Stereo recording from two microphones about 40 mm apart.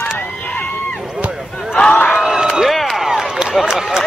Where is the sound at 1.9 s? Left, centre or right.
Left.